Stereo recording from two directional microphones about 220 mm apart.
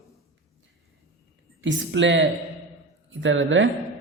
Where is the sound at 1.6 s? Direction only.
55° right (ahead or behind).